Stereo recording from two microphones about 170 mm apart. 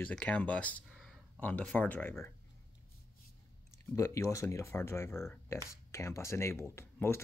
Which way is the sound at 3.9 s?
15° left (ahead or behind).